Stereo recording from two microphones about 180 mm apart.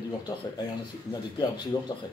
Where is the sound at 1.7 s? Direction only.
25° left (ahead or behind).